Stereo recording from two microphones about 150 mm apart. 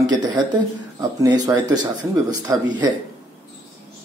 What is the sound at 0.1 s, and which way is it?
Speech, 30° right (ahead or behind).